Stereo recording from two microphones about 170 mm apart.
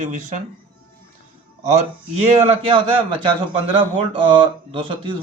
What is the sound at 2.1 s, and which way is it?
Speech, 35° right (ahead or behind).